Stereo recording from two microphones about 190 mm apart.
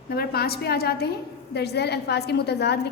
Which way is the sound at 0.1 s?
55° left (ahead or behind).